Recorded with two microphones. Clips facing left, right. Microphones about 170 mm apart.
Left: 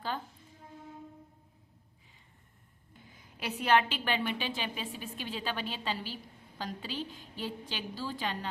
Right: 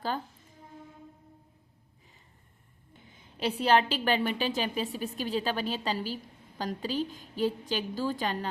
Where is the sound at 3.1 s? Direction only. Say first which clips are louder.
Right 7 dB; 25° right (ahead or behind).